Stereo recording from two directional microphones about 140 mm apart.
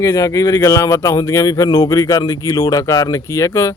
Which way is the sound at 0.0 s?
25° left (ahead or behind).